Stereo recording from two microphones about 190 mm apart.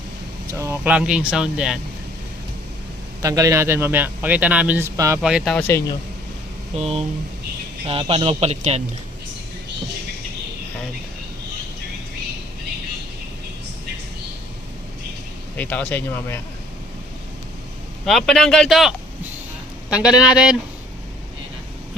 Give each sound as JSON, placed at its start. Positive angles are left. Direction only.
{"t": 0.5, "sound": "speech", "side_deg": -15}
{"t": 3.2, "sound": "a man's voice", "side_deg": -20}
{"t": 5.2, "sound": "speech", "side_deg": -5}
{"t": 5.5, "sound": "speech", "side_deg": 15}
{"t": 6.7, "sound": "speech", "side_deg": -30}
{"t": 15.5, "sound": "speech", "side_deg": 10}
{"t": 18.0, "sound": "speech", "side_deg": 0}